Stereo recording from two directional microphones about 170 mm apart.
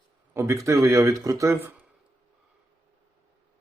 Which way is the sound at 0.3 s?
15° right (ahead or behind).